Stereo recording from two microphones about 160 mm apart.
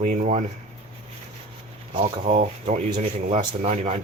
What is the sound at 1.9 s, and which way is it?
Speech, 35° right (ahead or behind).